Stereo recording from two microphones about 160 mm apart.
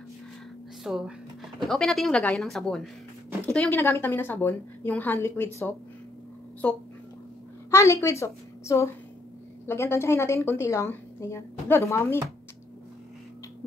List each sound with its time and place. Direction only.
0.8 s speech: 5° right (ahead or behind)
3.8 s a woman's voice: 15° left (ahead or behind)
7.7 s a woman's voice: 20° left (ahead or behind)